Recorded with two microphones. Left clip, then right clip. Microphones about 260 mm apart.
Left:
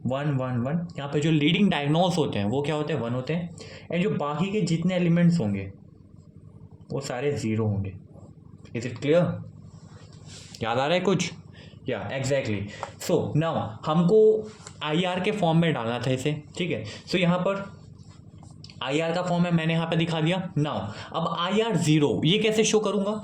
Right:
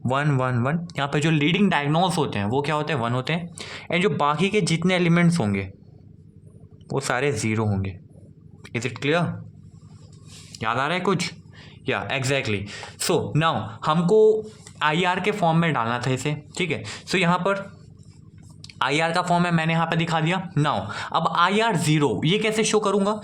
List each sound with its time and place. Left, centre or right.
0.1 s speech: right
6.9 s speech: right
10.6 s speech: centre
11.9 s speech: right
18.8 s a man's voice: right